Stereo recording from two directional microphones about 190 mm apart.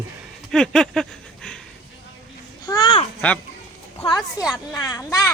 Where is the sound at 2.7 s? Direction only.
25° left (ahead or behind).